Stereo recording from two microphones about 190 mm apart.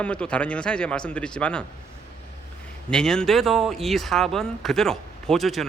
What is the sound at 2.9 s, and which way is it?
Speech, 5° left (ahead or behind).